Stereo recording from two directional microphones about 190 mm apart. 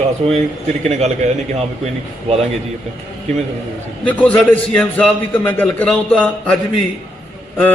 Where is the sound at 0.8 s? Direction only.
35° right (ahead or behind).